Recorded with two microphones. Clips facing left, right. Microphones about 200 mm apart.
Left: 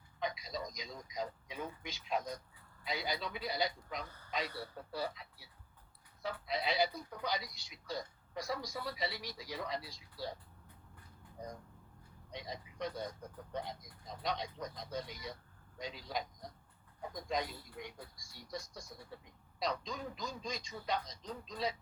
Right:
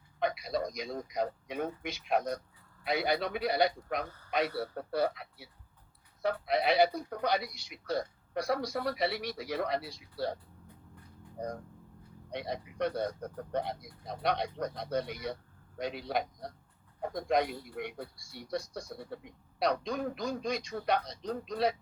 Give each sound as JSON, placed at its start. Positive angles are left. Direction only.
{"t": 0.2, "sound": "a man's voice", "side_deg": -65}
{"t": 11.3, "sound": "a man's voice", "side_deg": -60}